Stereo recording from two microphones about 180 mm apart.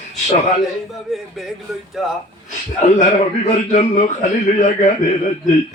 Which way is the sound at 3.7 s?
45° left (ahead or behind).